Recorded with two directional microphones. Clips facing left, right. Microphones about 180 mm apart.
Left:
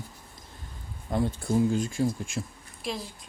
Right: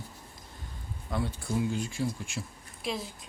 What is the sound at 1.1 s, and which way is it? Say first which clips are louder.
Speech: left 6 dB; 45° left (ahead or behind).